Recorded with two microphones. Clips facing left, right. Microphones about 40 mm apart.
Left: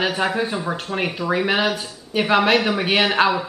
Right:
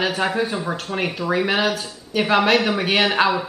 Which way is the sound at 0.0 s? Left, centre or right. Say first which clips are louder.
Even; centre.